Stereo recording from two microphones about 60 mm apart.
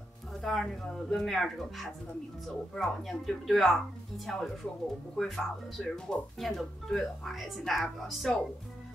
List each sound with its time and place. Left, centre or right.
0.3 s speech: centre